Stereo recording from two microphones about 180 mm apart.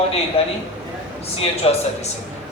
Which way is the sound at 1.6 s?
35° left (ahead or behind).